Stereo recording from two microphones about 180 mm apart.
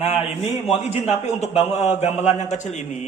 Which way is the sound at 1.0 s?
35° left (ahead or behind).